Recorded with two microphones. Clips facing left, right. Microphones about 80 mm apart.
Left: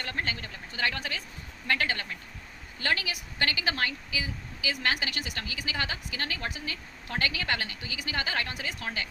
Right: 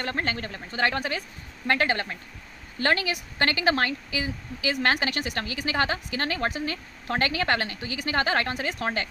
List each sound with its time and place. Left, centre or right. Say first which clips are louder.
0.0 s speech: right 5 dB; right